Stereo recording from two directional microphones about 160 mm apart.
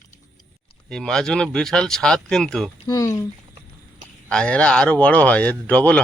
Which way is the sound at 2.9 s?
20° left (ahead or behind).